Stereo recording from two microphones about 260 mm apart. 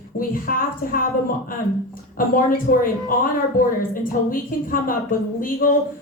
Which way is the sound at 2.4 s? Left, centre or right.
Left.